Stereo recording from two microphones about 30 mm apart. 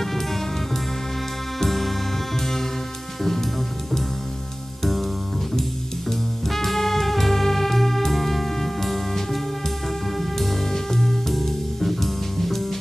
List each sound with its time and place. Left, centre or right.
0.0 s music: centre
1.6 s music: centre
3.2 s music: centre
4.8 s music: centre